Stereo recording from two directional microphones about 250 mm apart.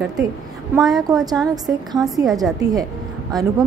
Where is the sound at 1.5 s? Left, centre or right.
Centre.